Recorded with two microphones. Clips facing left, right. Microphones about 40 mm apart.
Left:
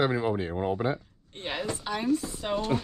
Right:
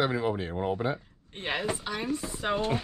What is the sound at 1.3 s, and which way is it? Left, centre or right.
Speech, centre.